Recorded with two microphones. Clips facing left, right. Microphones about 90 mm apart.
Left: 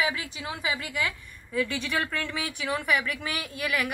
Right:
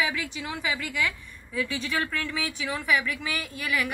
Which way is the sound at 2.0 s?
25° left (ahead or behind).